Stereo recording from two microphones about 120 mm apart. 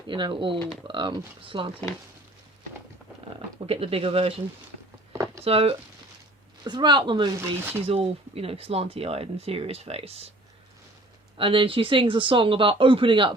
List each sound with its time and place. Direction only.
0.1 s speech: 45° right (ahead or behind)
3.7 s speech: 55° right (ahead or behind)
5.1 s a sound: 30° right (ahead or behind)
5.4 s speech: 55° right (ahead or behind)
6.7 s a woman's voice: 40° right (ahead or behind)
7.3 s speech: 20° right (ahead or behind)
7.8 s speech: 55° right (ahead or behind)
11.3 s speech: 45° right (ahead or behind)